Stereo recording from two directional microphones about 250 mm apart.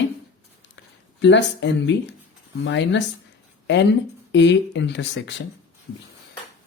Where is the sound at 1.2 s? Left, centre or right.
Left.